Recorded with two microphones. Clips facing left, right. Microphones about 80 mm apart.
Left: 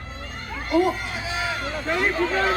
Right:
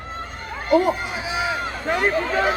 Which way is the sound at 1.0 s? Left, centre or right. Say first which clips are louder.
Right 3 dB; centre.